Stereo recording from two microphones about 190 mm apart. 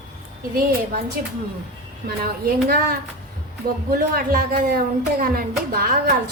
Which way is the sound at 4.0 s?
50° right (ahead or behind).